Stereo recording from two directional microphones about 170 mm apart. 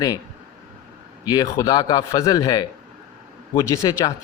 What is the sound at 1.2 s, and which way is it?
A man's voice, 20° left (ahead or behind).